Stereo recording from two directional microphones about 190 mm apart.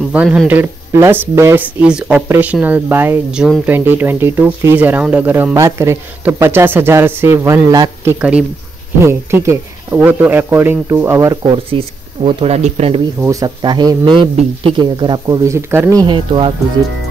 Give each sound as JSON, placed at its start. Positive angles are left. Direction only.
{"t": 0.1, "sound": "speech", "side_deg": -5}
{"t": 11.5, "sound": "speech", "side_deg": -30}
{"t": 13.2, "sound": "speech", "side_deg": -15}